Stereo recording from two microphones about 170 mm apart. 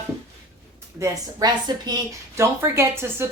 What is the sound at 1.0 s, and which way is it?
A woman's voice, 25° right (ahead or behind).